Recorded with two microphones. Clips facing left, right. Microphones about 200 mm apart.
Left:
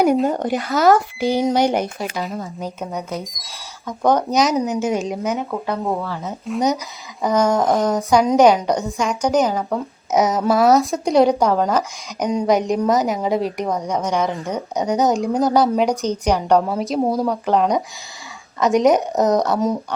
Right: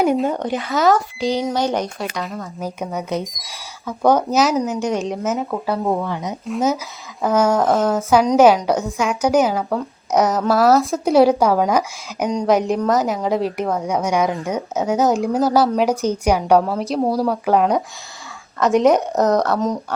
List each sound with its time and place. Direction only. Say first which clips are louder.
0.0 s speech: left 1 dB; centre (ahead or behind)
1.2 s speech: left 1 dB; 55° left (ahead or behind)
1.5 s speech: left 3 dB; 15° left (ahead or behind); by 6.3 s 15° right (ahead or behind)
6.4 s speech: left 1 dB; centre (ahead or behind)
12.3 s speech: even; centre (ahead or behind)